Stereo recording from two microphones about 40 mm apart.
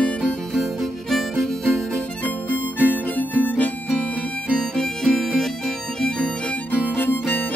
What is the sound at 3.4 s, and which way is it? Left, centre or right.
Harmonica, left.